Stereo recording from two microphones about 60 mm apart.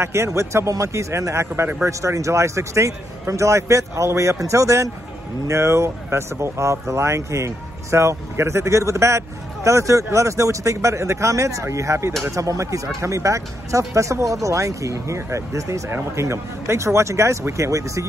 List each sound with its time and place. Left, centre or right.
0.0 s a man's voice: right